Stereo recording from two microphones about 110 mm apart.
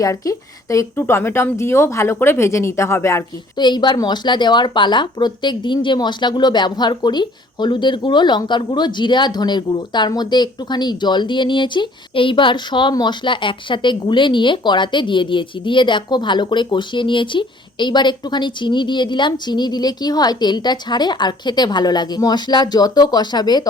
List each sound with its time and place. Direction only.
0.0 s a woman's voice: 30° left (ahead or behind)
3.6 s speech: 45° left (ahead or behind)